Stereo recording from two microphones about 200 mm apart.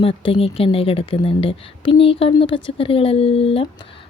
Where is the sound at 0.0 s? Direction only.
25° left (ahead or behind).